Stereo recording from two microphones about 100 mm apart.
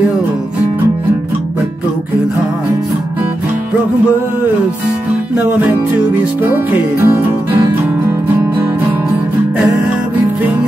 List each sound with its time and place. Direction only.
5.3 s music: 20° right (ahead or behind)